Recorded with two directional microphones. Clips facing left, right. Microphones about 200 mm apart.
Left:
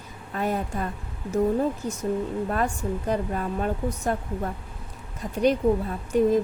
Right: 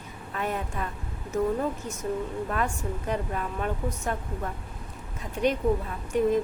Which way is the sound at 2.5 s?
35° left (ahead or behind).